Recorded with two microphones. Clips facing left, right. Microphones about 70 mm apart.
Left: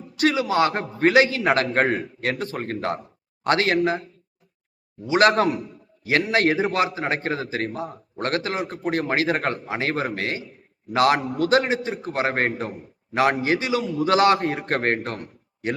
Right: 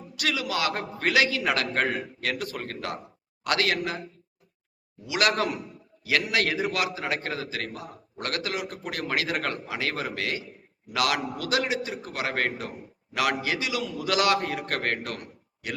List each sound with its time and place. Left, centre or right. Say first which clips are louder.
0.2 s a man's voice: left 8 dB; left
5.0 s a man's voice: left 7 dB; left